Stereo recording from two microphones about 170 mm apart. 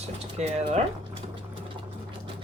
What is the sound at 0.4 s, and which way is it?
Speech, 40° right (ahead or behind).